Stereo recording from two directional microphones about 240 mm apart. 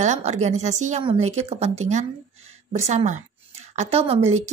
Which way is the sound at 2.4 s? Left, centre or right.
Right.